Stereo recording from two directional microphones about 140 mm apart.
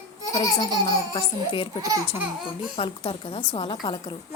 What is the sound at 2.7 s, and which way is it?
A woman's voice, 40° left (ahead or behind).